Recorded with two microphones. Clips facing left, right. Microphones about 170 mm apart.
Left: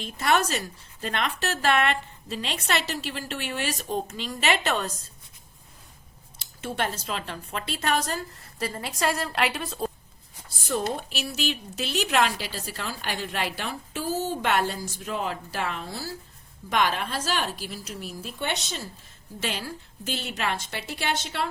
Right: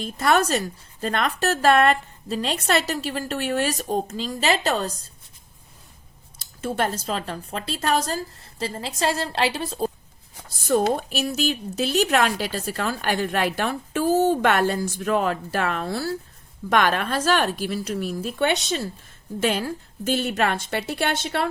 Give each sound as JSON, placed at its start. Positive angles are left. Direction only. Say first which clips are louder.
{"t": 0.0, "sound": "speech", "louder": "right 4 dB", "side_deg": -40}
{"t": 6.4, "sound": "speech", "louder": "right 5 dB", "side_deg": -40}
{"t": 10.9, "sound": "a woman's voice", "louder": "right 7 dB", "side_deg": -45}
{"t": 19.4, "sound": "a woman's voice", "louder": "right 9 dB", "side_deg": -50}